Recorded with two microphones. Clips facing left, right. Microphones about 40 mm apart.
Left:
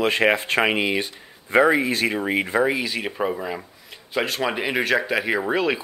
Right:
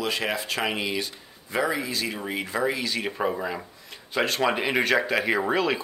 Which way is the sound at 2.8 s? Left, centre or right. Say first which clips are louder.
Left 2 dB; centre.